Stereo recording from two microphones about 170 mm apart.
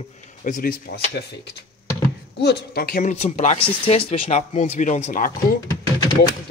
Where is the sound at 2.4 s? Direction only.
70° left (ahead or behind).